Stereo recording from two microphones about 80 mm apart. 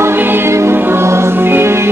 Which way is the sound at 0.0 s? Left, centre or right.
Right.